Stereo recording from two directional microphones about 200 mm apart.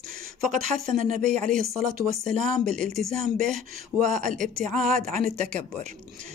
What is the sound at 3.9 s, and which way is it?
Speech, 40° right (ahead or behind).